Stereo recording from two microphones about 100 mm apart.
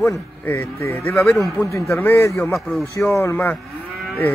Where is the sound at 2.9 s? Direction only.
30° left (ahead or behind).